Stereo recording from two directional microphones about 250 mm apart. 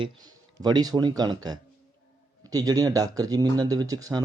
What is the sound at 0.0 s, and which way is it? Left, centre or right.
Speech, centre.